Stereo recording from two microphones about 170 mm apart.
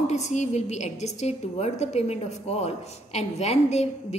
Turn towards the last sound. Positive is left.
turn(degrees=40)  # may be behind; listen again after turning